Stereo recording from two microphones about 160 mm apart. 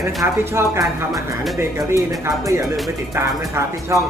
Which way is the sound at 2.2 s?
20° right (ahead or behind).